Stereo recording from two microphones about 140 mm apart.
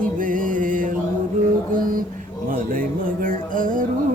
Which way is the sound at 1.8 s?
85° right.